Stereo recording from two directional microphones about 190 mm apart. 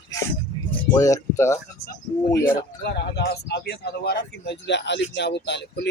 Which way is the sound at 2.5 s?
60° left (ahead or behind).